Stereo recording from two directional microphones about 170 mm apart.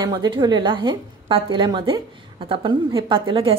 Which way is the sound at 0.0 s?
25° right (ahead or behind).